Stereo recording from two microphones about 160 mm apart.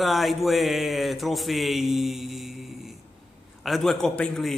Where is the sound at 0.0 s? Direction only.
Centre (ahead or behind).